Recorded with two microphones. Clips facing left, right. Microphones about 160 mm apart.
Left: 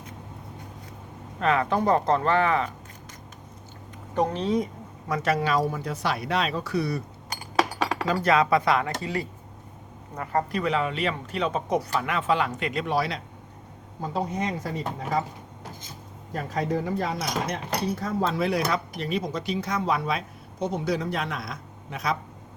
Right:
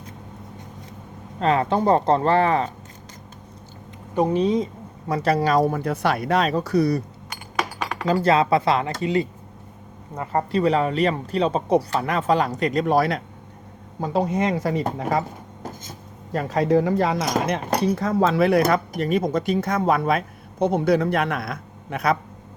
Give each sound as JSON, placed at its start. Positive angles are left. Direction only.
{"t": 1.4, "sound": "speech", "side_deg": -30}
{"t": 4.1, "sound": "speech", "side_deg": -10}
{"t": 8.0, "sound": "speech", "side_deg": -30}
{"t": 14.0, "sound": "speech", "side_deg": -85}
{"t": 16.3, "sound": "speech", "side_deg": -90}